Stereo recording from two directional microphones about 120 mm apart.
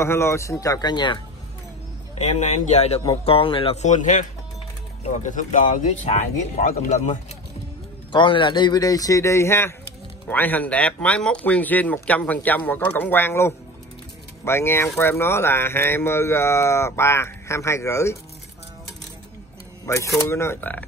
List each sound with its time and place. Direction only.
0.0 s speech: 20° left (ahead or behind); by 1.2 s 40° left (ahead or behind)
2.1 s speech: 75° left (ahead or behind)
3.3 s speech: 50° left (ahead or behind)
3.7 s speech: 85° left
8.1 s speech: 40° left (ahead or behind); by 18.1 s 25° left (ahead or behind)
19.9 s speech: 25° left (ahead or behind)